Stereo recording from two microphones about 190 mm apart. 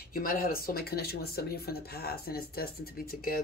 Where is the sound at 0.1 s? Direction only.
50° left (ahead or behind).